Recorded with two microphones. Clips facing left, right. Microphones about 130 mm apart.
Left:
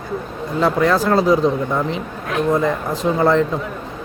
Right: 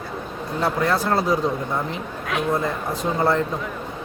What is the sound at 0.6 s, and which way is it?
Speech, 90° left.